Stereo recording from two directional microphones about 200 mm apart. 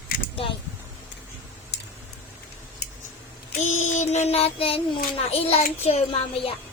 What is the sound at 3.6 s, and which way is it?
Child singing, 35° left (ahead or behind).